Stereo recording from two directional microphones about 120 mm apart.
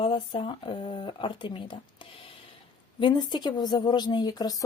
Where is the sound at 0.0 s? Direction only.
45° left (ahead or behind).